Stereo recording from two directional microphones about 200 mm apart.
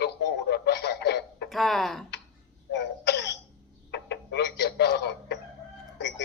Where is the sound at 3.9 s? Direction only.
55° left (ahead or behind).